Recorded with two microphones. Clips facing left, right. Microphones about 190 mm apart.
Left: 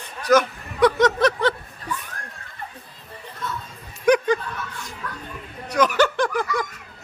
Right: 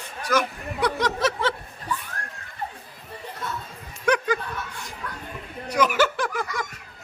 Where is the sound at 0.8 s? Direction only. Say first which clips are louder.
Left 7 dB; centre (ahead or behind).